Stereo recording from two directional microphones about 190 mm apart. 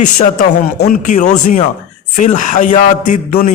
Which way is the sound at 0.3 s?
45° left (ahead or behind).